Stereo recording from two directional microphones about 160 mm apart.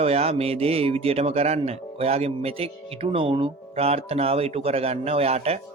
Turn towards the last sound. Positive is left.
turn(degrees=-40)  # may be behind; listen again after turning